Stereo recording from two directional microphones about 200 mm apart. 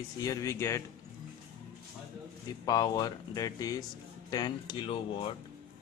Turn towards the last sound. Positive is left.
turn(degrees=25)  # may be behind; listen again after turning